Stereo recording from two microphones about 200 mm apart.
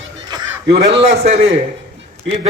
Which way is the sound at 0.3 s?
20° right (ahead or behind).